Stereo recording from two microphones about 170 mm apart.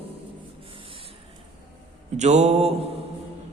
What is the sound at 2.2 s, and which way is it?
Speech, 40° right (ahead or behind).